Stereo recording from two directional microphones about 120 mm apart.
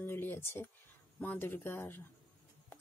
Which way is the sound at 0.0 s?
15° left (ahead or behind).